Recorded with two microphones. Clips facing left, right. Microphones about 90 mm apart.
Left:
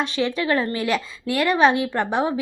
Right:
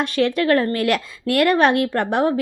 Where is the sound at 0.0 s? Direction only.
55° right (ahead or behind).